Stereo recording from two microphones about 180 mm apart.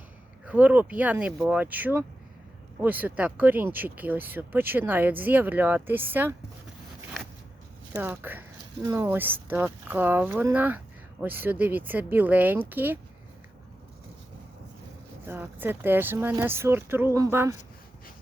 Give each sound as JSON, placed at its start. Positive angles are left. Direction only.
{"t": 0.4, "sound": "speech", "side_deg": -10}
{"t": 7.9, "sound": "speech", "side_deg": -10}
{"t": 15.3, "sound": "speech", "side_deg": -10}